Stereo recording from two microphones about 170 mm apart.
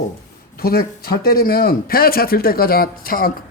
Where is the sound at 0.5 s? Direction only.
65° left (ahead or behind).